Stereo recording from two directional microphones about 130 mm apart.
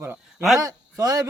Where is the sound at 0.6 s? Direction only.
25° right (ahead or behind).